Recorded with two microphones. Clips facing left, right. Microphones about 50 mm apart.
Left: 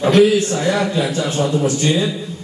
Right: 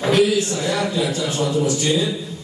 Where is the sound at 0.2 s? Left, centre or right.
Left.